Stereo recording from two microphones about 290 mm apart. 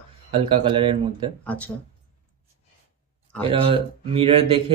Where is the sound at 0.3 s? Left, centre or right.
Centre.